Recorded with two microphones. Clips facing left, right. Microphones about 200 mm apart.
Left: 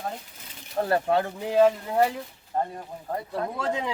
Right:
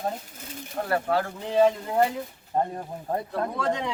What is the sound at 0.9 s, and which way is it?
Speech, 20° left (ahead or behind).